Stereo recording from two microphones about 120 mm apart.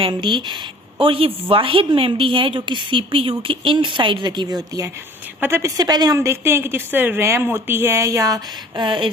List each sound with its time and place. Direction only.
0.0 s a woman's voice: 45° right (ahead or behind)
5.4 s speech: 20° right (ahead or behind)
5.7 s a woman's voice: 35° right (ahead or behind)
6.1 s speech: 20° right (ahead or behind); by 9.1 s 45° right (ahead or behind)